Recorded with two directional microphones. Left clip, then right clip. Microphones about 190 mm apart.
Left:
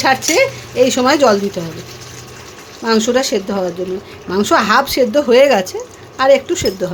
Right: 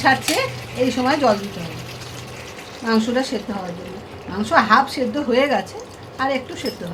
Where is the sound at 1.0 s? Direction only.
60° left (ahead or behind).